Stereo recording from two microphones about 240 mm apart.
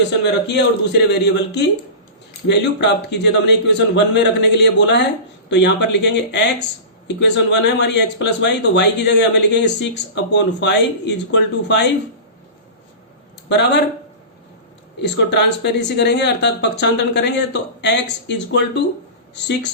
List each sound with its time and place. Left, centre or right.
0.2 s speech: left
13.5 s speech: left
15.0 s speech: left